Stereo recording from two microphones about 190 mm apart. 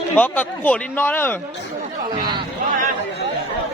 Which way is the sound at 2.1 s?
25° right (ahead or behind).